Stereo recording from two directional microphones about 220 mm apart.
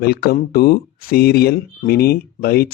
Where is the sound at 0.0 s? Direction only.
45° left (ahead or behind).